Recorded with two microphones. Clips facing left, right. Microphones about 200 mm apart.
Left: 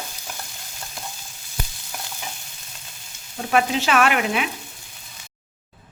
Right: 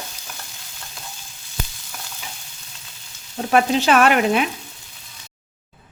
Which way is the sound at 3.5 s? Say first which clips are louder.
Right 4 dB; 35° right (ahead or behind).